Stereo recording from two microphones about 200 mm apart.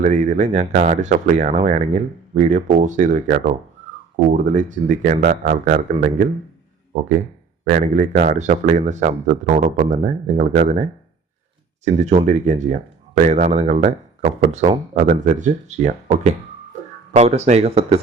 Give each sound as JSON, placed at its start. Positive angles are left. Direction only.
{"t": 0.0, "sound": "speech", "side_deg": -35}
{"t": 11.9, "sound": "speech", "side_deg": -35}